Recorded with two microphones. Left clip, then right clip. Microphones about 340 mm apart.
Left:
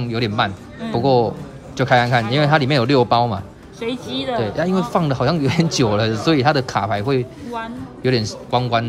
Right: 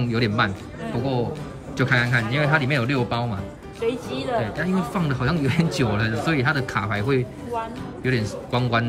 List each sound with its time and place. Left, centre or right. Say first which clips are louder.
0.0 s speech: left 2 dB; centre
1.8 s speech: left 6 dB; centre
3.8 s speech: left 1 dB; left
4.4 s speech: left 5 dB; centre